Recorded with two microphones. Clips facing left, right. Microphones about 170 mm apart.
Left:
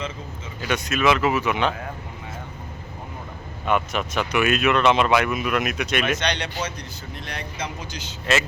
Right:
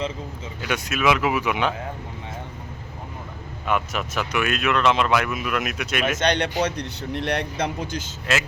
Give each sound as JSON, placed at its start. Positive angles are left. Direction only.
{"t": 0.6, "sound": "speech", "side_deg": -5}
{"t": 3.7, "sound": "speech", "side_deg": -5}
{"t": 6.1, "sound": "speech", "side_deg": -50}